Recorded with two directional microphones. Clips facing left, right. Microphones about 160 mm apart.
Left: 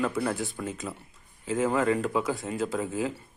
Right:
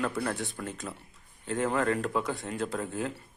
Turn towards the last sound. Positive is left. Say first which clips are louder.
# left 3 dB
turn(degrees=0)  # may be behind; listen again after turning